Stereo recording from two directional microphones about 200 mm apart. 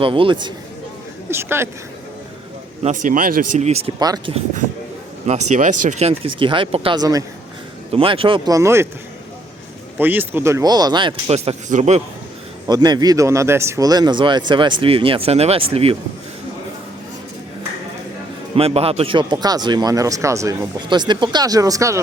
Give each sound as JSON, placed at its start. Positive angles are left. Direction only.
{"t": 0.0, "sound": "speech", "side_deg": -25}
{"t": 1.3, "sound": "speech", "side_deg": -10}
{"t": 2.8, "sound": "speech", "side_deg": -40}
{"t": 4.0, "sound": "speech", "side_deg": -20}
{"t": 5.2, "sound": "speech", "side_deg": -35}
{"t": 10.0, "sound": "speech", "side_deg": -10}
{"t": 12.6, "sound": "speech", "side_deg": -20}
{"t": 18.5, "sound": "speech", "side_deg": -30}